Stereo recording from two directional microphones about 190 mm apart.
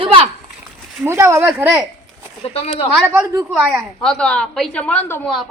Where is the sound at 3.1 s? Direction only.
15° right (ahead or behind).